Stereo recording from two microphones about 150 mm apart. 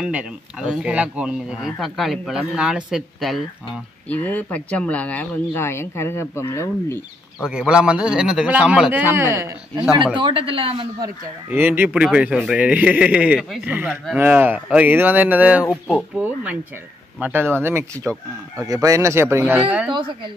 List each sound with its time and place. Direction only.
0.0 s speech: 5° right (ahead or behind)
4.1 s speech: 10° left (ahead or behind)
7.4 s a man's voice: 5° right (ahead or behind)
10.1 s speech: 35° right (ahead or behind)
11.5 s a man's voice: 15° right (ahead or behind)
15.6 s speech: 10° left (ahead or behind)
17.2 s a man's voice: 15° right (ahead or behind)